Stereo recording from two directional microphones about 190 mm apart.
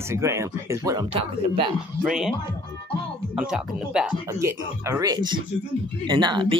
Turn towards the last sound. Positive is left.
turn(degrees=-25)  # may be behind; listen again after turning